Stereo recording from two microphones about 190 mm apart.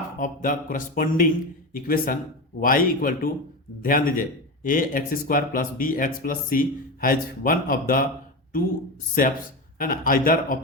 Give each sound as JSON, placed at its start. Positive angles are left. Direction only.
{"t": 0.2, "sound": "a man's voice", "side_deg": 45}
{"t": 9.2, "sound": "a man's voice", "side_deg": 45}